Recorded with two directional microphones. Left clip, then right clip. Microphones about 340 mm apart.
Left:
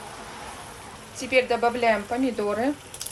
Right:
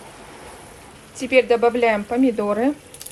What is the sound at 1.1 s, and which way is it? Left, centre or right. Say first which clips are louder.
Speech: right 6 dB; right.